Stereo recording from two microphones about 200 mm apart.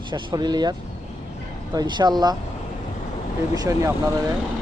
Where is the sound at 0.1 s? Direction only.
20° right (ahead or behind).